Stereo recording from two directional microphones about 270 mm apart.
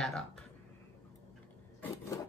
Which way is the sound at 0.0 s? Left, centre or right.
Centre.